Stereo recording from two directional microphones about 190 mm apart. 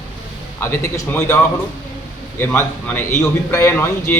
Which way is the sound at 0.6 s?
15° left (ahead or behind).